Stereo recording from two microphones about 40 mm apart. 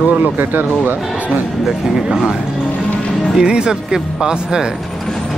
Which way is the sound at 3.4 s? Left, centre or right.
Right.